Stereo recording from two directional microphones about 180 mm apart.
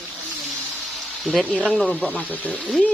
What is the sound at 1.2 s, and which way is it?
A woman's voice, 5° left (ahead or behind).